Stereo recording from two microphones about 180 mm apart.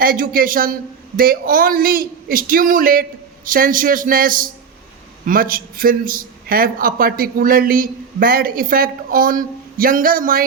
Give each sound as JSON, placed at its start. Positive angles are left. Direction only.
{"t": 0.0, "sound": "a man's voice", "side_deg": -50}